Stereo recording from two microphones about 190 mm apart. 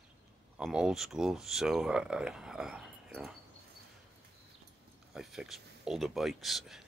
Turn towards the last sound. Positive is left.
turn(degrees=0)  # may be behind; listen again after turning